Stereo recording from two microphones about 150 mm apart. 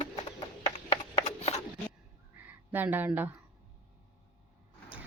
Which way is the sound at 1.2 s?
45° left (ahead or behind).